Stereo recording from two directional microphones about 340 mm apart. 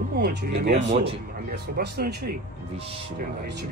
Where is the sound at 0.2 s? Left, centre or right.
Right.